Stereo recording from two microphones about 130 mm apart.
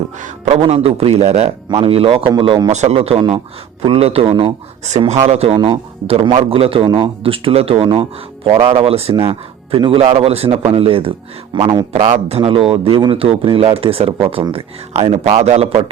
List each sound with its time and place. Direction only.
0.2 s a man's voice: 55° right (ahead or behind)
1.8 s a man's voice: 45° right (ahead or behind)
2.7 s a man's voice: 55° right (ahead or behind)
4.9 s a man's voice: 60° right (ahead or behind); by 11.9 s 35° right (ahead or behind)
12.1 s a man's voice: 50° right (ahead or behind)